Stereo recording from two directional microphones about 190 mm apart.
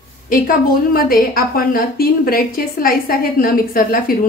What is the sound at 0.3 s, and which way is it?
A woman's voice, 50° left (ahead or behind).